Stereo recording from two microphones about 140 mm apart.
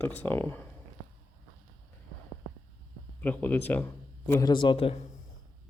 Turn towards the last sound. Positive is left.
turn(degrees=40)  # may be behind; listen again after turning